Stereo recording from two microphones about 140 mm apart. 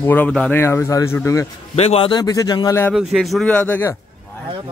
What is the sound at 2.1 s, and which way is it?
Speech, 25° left (ahead or behind).